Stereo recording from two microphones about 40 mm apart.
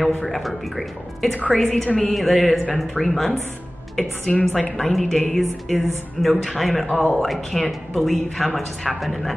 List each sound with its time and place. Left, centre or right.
0.2 s speech: centre
4.3 s a woman's voice: left
4.7 s speech: centre